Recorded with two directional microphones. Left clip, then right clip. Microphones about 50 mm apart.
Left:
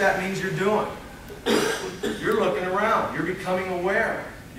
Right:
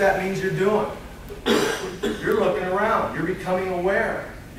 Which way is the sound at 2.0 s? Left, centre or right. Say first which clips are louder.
Right 3 dB; right.